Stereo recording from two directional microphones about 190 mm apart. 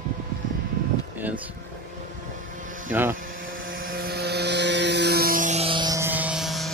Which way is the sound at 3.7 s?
50° right (ahead or behind).